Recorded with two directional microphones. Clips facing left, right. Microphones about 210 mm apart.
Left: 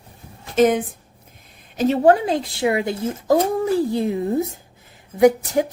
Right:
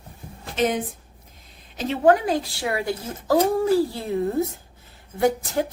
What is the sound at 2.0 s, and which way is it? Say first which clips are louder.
A woman's voice: right 1 dB; 25° left (ahead or behind).